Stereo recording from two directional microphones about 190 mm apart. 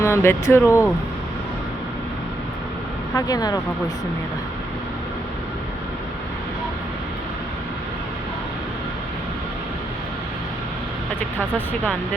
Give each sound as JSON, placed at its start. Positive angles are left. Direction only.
{"t": 0.0, "sound": "speech", "side_deg": 15}
{"t": 3.2, "sound": "speech", "side_deg": 20}
{"t": 11.5, "sound": "speech", "side_deg": 10}